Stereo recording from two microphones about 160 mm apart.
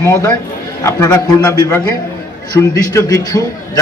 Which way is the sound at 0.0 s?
20° left (ahead or behind).